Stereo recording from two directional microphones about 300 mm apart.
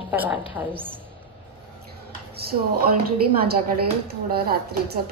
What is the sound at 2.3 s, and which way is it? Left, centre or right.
A woman's voice, right.